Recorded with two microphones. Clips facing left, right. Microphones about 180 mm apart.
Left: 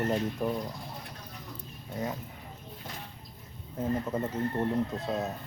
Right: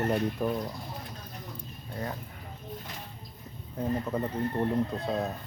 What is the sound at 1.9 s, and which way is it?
Speech, 20° left (ahead or behind).